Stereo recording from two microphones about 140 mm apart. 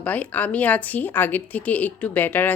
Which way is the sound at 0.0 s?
10° left (ahead or behind).